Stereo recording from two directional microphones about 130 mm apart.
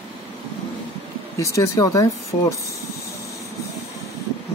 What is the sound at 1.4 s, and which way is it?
Speech, 25° left (ahead or behind).